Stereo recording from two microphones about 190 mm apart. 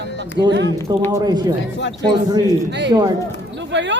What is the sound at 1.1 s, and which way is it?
Speech, 20° right (ahead or behind).